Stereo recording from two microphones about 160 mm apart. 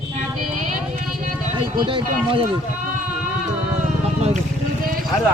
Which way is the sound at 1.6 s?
30° right (ahead or behind).